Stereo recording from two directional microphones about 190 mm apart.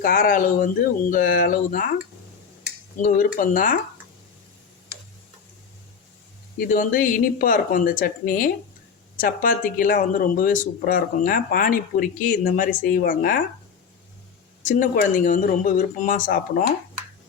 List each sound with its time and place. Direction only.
0.0 s speech: 45° left (ahead or behind)
3.0 s speech: 45° left (ahead or behind)
6.6 s speech: 45° left (ahead or behind)
14.6 s speech: 45° left (ahead or behind)